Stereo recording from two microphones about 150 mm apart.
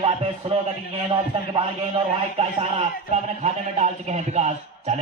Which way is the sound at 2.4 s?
40° right (ahead or behind).